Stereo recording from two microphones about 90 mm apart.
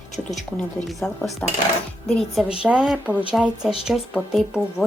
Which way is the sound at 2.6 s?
10° right (ahead or behind).